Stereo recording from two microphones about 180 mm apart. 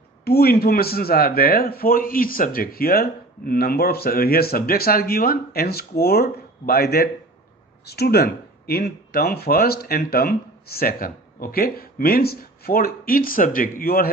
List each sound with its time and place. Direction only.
0.3 s speech: 60° left (ahead or behind)